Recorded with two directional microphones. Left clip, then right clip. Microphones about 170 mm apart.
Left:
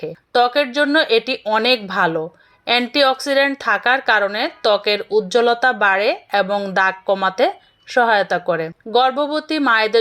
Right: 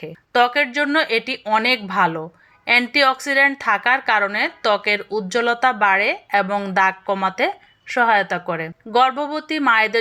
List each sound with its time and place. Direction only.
0.0 s a woman's voice: 25° left (ahead or behind)